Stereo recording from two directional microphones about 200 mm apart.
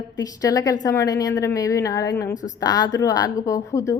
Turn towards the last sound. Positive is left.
turn(degrees=15)  # may be behind; listen again after turning